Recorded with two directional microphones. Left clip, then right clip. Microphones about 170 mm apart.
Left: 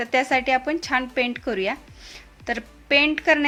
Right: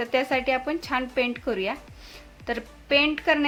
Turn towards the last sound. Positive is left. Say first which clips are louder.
# left 3 dB
turn(degrees=20)  # may be behind; listen again after turning